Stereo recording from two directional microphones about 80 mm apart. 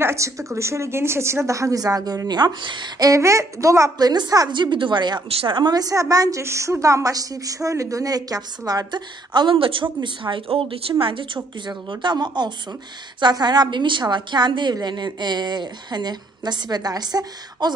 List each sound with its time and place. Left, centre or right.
0.0 s a woman's voice: right
3.0 s a woman's voice: right
4.0 s a woman's voice: right
4.5 s a woman's voice: right
6.4 s a woman's voice: right
14.0 s a woman's voice: right